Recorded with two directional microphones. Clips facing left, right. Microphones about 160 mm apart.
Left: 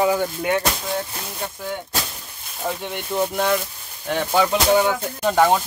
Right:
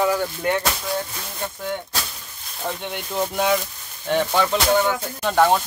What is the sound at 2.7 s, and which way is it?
Speech, centre (ahead or behind).